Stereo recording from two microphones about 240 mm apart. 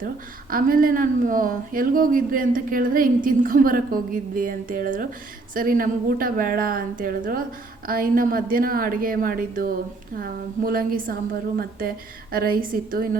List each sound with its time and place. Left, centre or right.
0.5 s speech: right